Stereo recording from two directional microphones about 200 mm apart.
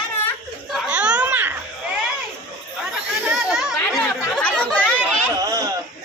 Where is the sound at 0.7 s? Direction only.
5° right (ahead or behind).